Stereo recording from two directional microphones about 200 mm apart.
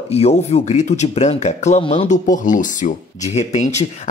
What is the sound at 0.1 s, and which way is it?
Speech, 30° left (ahead or behind).